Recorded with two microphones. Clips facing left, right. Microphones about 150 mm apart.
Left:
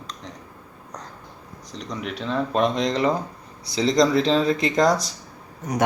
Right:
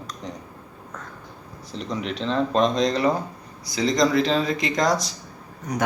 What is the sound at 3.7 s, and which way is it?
Speech, 30° left (ahead or behind).